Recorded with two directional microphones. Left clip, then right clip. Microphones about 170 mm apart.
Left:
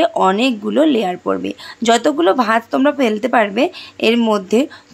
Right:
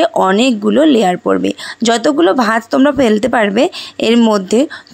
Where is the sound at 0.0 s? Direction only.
40° right (ahead or behind).